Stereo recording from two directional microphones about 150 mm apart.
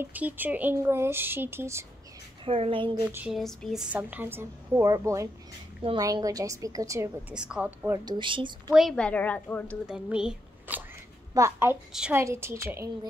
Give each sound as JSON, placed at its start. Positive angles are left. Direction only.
{"t": 0.0, "sound": "a woman's voice", "side_deg": -10}
{"t": 2.4, "sound": "a woman's voice", "side_deg": -40}
{"t": 3.3, "sound": "a woman's voice", "side_deg": 0}
{"t": 7.3, "sound": "a woman's voice", "side_deg": -5}
{"t": 8.0, "sound": "a woman's voice", "side_deg": -30}
{"t": 8.7, "sound": "a woman's voice", "side_deg": 5}
{"t": 9.8, "sound": "speech", "side_deg": -5}
{"t": 11.3, "sound": "a woman's voice", "side_deg": -15}
{"t": 11.9, "sound": "a woman's voice", "side_deg": -5}
{"t": 12.2, "sound": "a woman's voice", "side_deg": -15}